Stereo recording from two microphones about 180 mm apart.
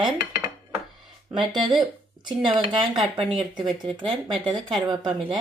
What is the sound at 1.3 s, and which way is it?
Speech, 25° right (ahead or behind).